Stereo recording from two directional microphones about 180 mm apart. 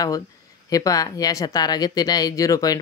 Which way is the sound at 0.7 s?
20° left (ahead or behind).